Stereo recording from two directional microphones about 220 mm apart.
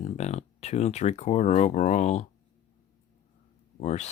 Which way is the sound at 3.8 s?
30° left (ahead or behind).